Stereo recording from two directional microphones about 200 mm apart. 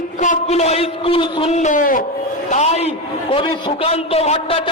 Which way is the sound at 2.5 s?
35° left (ahead or behind).